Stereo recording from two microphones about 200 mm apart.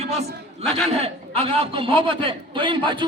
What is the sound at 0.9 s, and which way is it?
A man's voice, 30° right (ahead or behind).